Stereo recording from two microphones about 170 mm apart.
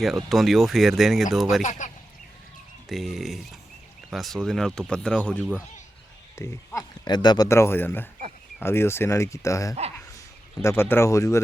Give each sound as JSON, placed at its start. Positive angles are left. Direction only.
{"t": 0.0, "sound": "speech", "side_deg": 0}
{"t": 2.9, "sound": "speech", "side_deg": 0}